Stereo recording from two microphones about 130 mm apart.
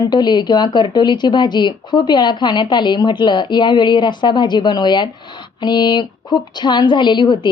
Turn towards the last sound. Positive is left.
turn(degrees=35)  # may be behind; listen again after turning